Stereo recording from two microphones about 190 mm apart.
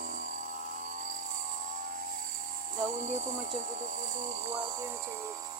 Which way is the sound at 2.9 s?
40° right (ahead or behind).